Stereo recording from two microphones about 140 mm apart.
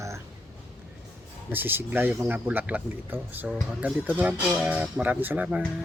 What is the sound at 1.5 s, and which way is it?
Speech, 15° right (ahead or behind).